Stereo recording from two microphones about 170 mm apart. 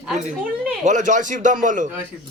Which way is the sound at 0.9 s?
45° right (ahead or behind).